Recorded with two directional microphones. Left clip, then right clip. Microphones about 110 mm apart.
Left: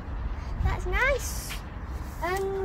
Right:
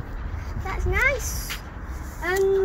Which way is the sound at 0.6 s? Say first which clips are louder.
Right 4 dB; 30° left (ahead or behind).